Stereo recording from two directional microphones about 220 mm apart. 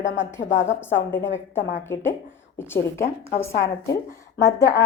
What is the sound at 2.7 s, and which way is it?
A woman's voice, 10° left (ahead or behind).